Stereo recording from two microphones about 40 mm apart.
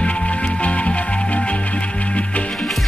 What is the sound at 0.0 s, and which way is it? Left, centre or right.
Music, left.